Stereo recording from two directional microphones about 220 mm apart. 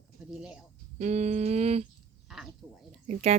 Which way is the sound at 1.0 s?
30° right (ahead or behind).